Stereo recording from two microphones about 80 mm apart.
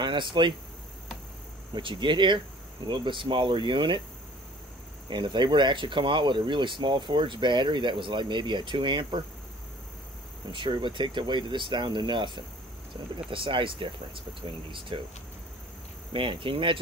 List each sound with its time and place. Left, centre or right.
0.0 s speech: right
1.8 s speech: right
5.1 s speech: right
10.5 s speech: right
16.1 s speech: right